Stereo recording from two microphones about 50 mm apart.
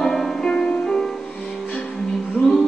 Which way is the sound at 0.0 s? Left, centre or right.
Centre.